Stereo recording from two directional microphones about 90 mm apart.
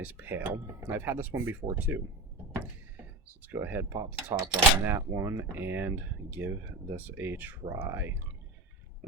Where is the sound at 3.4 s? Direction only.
20° right (ahead or behind).